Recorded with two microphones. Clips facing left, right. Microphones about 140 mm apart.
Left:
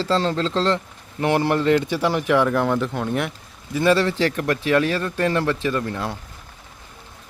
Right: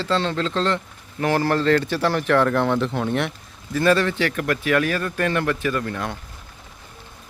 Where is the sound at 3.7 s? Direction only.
20° left (ahead or behind).